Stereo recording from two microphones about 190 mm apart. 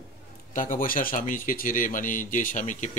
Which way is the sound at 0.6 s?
45° left (ahead or behind).